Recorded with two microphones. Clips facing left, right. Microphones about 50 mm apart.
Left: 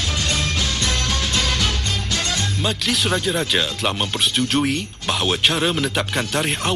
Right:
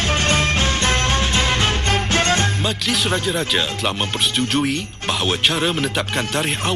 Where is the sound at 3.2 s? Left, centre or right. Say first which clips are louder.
Even; centre.